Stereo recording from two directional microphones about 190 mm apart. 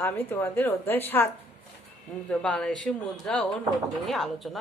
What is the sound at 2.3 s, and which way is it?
A woman's voice, 5° left (ahead or behind).